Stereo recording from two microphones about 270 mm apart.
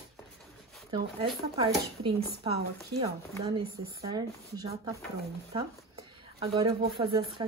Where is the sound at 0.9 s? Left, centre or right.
Centre.